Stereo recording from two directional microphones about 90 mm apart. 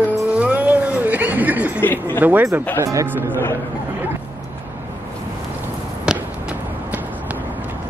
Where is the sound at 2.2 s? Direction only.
20° right (ahead or behind).